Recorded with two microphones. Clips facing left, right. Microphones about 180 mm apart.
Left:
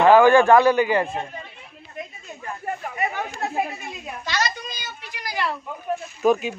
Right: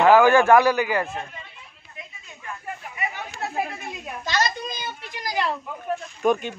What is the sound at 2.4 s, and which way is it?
Chatter, 45° left (ahead or behind).